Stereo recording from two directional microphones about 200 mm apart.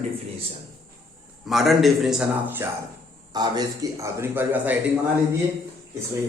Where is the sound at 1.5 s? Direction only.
Centre (ahead or behind).